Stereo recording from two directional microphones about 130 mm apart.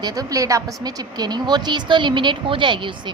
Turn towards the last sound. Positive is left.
turn(degrees=-40)  # may be behind; listen again after turning